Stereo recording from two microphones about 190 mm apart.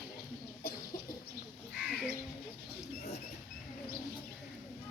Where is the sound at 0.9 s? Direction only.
50° left (ahead or behind).